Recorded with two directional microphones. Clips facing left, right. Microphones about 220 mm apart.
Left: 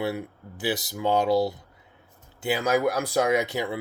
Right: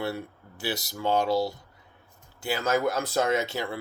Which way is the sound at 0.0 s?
20° left (ahead or behind).